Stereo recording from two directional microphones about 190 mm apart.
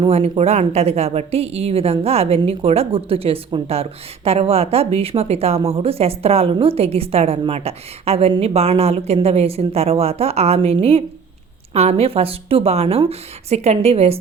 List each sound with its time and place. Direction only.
0.0 s speech: 30° right (ahead or behind)